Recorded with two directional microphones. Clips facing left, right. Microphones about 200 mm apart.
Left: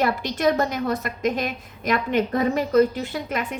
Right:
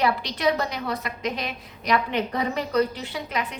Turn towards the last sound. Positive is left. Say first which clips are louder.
# left 3 dB
turn(degrees=45)  # may be behind; listen again after turning